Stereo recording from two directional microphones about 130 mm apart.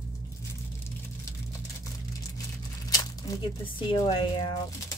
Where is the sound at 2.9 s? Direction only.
30° left (ahead or behind).